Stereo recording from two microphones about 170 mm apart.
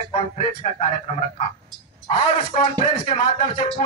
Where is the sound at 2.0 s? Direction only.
35° left (ahead or behind).